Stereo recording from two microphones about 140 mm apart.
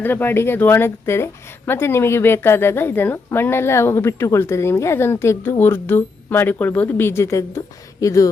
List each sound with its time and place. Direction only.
0.0 s speech: 15° left (ahead or behind)